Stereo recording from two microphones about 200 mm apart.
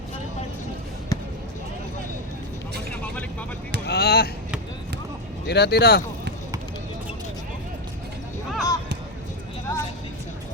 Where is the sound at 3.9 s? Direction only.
50° left (ahead or behind).